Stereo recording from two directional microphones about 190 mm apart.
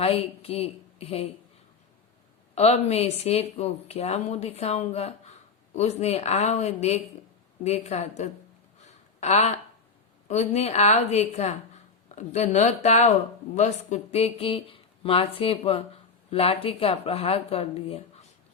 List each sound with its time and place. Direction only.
0.0 s a woman's voice: 30° left (ahead or behind)
2.6 s a woman's voice: 35° left (ahead or behind)
8.9 s a sound: 35° left (ahead or behind)
10.2 s a woman's voice: 35° left (ahead or behind)